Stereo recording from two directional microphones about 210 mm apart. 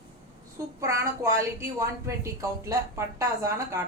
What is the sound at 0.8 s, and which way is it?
Speech, 15° right (ahead or behind).